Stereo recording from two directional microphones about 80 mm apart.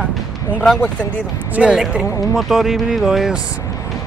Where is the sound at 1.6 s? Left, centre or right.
Centre.